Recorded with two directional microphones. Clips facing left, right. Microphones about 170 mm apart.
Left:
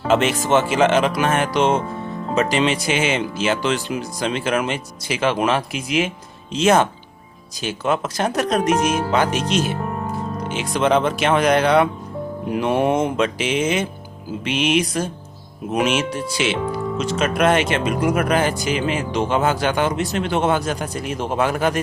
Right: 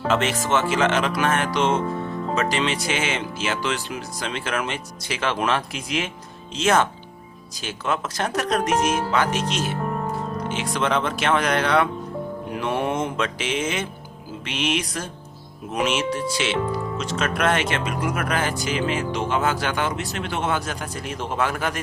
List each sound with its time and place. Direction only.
0.1 s speech: 15° left (ahead or behind)